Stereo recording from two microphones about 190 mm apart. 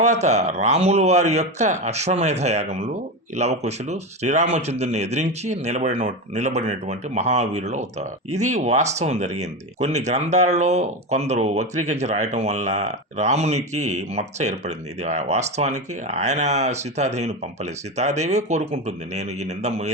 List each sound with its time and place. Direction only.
0.0 s speech: 35° right (ahead or behind)